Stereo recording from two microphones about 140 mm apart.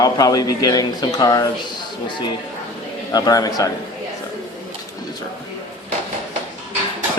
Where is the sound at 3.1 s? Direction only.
25° left (ahead or behind).